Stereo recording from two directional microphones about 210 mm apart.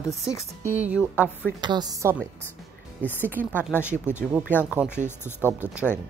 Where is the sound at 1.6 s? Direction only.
20° right (ahead or behind).